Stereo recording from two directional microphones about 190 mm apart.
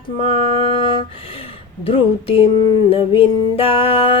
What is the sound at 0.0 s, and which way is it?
Speech, 30° left (ahead or behind).